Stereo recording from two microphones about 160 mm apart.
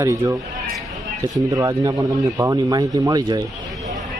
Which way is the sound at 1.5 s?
25° right (ahead or behind).